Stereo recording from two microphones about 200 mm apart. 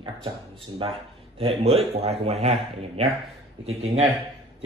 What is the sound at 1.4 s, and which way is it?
Speech, 30° right (ahead or behind).